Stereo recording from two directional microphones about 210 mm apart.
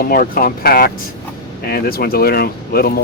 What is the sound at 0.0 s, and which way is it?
Speech, 45° left (ahead or behind).